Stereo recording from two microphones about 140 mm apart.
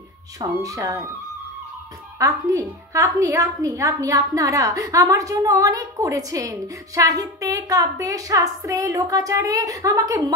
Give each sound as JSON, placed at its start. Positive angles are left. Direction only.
{"t": 0.4, "sound": "a woman's voice", "side_deg": -25}
{"t": 2.1, "sound": "a woman's voice", "side_deg": -20}